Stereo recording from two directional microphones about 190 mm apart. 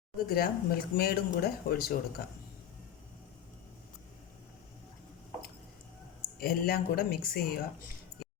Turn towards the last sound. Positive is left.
turn(degrees=55)  # may be behind; listen again after turning